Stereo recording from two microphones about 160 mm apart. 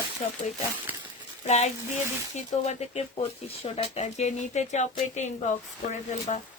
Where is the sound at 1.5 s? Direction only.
45° left (ahead or behind).